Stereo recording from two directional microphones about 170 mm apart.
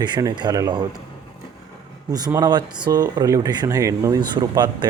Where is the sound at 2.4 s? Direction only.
25° right (ahead or behind).